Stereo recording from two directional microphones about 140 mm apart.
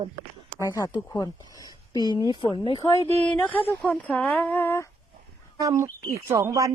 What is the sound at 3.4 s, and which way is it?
Speech, 10° left (ahead or behind).